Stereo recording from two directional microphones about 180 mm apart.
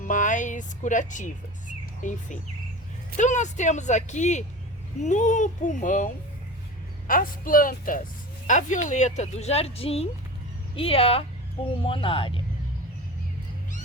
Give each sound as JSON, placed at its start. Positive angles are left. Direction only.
{"t": 0.0, "sound": "a child's voice", "side_deg": 45}
{"t": 7.1, "sound": "a child's voice", "side_deg": 50}